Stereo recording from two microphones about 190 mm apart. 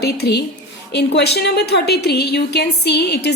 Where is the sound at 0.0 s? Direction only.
60° left (ahead or behind).